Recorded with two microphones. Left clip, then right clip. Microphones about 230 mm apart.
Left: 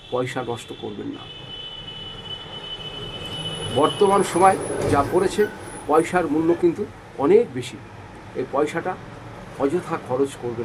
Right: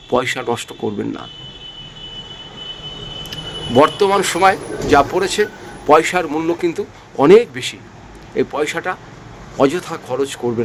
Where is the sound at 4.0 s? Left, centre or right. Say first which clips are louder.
Right 3 dB; right.